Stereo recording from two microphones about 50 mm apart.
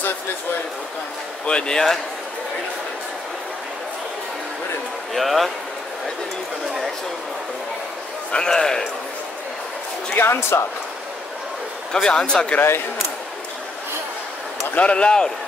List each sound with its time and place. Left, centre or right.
1.4 s speech: centre
5.1 s speech: centre
8.3 s speech: centre
10.1 s speech: left
11.9 s speech: centre
14.8 s speech: left